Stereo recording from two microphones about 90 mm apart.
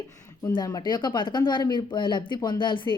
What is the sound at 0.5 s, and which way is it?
Speech, 50° left (ahead or behind).